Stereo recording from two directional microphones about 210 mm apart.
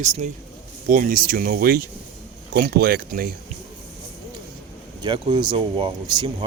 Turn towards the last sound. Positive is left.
turn(degrees=-20)  # may be behind; listen again after turning